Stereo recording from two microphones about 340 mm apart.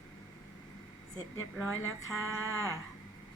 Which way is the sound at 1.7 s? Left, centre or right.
Left.